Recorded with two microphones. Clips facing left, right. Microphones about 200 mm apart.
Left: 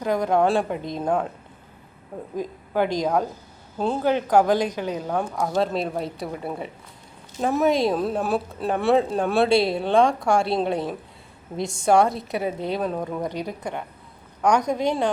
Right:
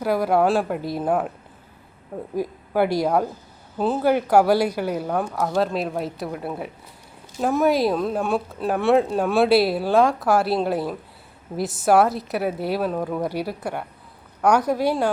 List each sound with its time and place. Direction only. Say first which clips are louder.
0.0 s speech: right 1 dB; 5° right (ahead or behind)
2.3 s speech: right 2 dB; 10° right (ahead or behind)